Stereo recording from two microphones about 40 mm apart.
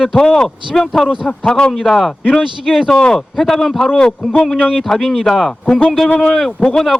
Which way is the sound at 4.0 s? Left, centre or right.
Centre.